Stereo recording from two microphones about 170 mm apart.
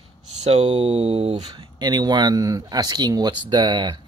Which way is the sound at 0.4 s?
40° right (ahead or behind).